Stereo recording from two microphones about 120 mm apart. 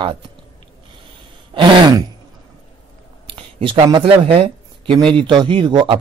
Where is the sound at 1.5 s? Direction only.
45° right (ahead or behind).